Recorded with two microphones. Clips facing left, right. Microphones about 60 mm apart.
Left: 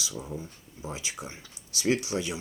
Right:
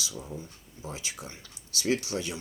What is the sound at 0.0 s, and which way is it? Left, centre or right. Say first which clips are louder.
Speech: left 2 dB; centre.